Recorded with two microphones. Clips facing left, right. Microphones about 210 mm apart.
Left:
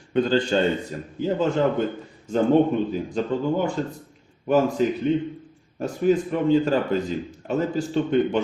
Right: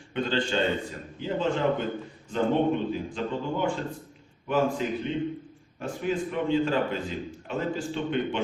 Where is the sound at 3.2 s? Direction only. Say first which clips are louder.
Left 8 dB; 40° left (ahead or behind).